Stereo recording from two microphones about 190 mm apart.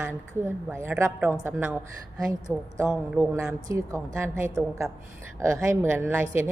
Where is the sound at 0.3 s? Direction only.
15° right (ahead or behind).